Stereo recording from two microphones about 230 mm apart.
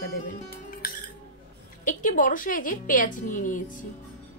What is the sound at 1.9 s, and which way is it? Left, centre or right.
A woman's voice, left.